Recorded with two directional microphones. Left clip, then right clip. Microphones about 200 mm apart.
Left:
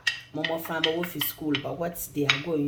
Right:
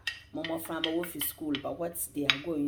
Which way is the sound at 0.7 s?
45° right (ahead or behind).